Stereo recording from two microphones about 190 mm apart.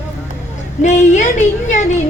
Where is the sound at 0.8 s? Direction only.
35° left (ahead or behind).